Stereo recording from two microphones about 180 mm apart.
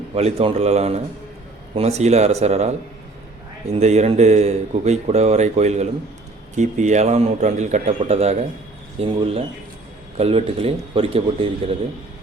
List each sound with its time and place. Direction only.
0.1 s speech: 35° right (ahead or behind)
3.8 s speech: 40° right (ahead or behind)